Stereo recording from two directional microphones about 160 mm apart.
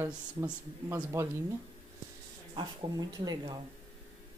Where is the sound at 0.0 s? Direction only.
15° right (ahead or behind).